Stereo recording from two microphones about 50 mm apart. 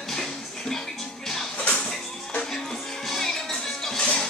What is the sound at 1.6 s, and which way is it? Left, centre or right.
Music, left.